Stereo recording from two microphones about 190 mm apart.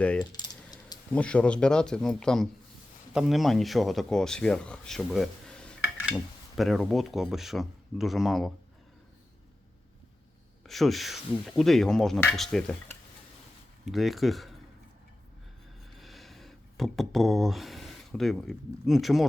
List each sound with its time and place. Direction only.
0.2 s coin: 20° left (ahead or behind)
1.1 s speech: 5° left (ahead or behind)
10.7 s speech: centre (ahead or behind)
16.0 s speech: centre (ahead or behind)